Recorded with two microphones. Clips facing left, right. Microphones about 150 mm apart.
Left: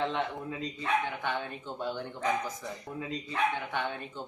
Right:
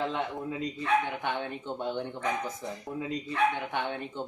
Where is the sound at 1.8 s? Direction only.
20° right (ahead or behind).